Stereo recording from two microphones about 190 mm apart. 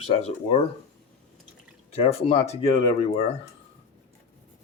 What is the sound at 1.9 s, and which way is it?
Speech, 35° left (ahead or behind).